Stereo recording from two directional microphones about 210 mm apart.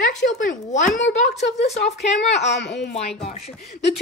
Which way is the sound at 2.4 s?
55° left (ahead or behind).